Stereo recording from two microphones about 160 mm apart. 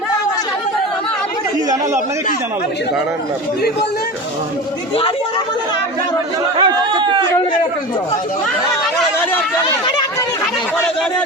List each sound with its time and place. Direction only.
6.6 s speech: 30° right (ahead or behind)